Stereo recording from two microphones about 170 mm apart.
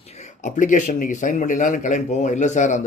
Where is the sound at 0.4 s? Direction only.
45° left (ahead or behind).